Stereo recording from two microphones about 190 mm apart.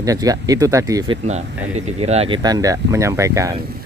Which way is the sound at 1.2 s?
35° right (ahead or behind).